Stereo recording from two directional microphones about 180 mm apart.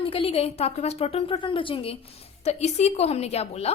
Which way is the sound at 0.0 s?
30° left (ahead or behind).